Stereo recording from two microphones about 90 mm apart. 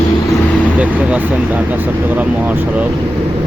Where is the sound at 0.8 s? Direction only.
15° right (ahead or behind).